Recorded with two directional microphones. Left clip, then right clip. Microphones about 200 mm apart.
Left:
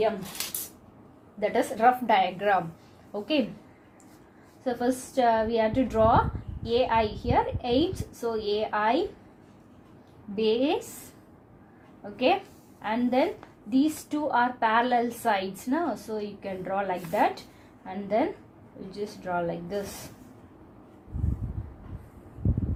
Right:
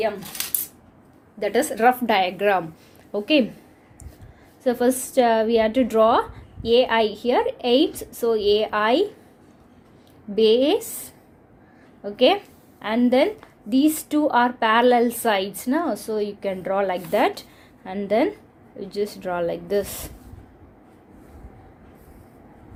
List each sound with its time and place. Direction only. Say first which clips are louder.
0.4 s cutlery: right 6 dB; 45° right (ahead or behind)
1.4 s a woman's voice: right 4 dB; 40° right (ahead or behind)
4.6 s a woman's voice: right 7 dB; 55° right (ahead or behind)
10.3 s a woman's voice: right 8 dB; 55° right (ahead or behind)
12.1 s a woman's voice: right 7 dB; 55° right (ahead or behind)